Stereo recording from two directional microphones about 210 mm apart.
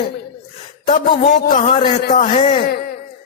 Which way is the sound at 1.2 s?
50° left (ahead or behind).